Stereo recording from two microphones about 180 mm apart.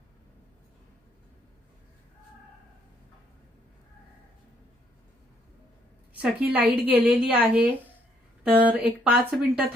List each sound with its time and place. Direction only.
6.2 s a woman's voice: 10° right (ahead or behind)